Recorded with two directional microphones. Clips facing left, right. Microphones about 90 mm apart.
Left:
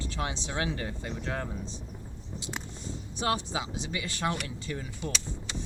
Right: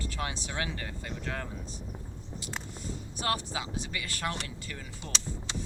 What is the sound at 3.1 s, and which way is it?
Speech, 25° left (ahead or behind).